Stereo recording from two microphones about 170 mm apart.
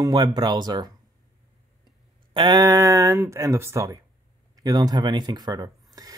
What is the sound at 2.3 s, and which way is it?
Speech, 25° right (ahead or behind).